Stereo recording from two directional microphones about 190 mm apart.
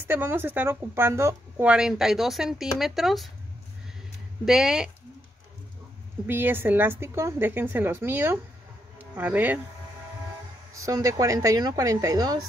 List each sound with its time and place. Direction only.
0.0 s a woman's voice: 10° right (ahead or behind)
4.5 s a woman's voice: 5° right (ahead or behind)
6.2 s a woman's voice: 10° right (ahead or behind)
10.7 s a woman's voice: 15° right (ahead or behind)